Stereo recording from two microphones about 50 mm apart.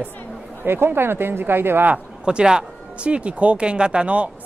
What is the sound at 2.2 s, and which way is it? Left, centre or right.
Speech, centre.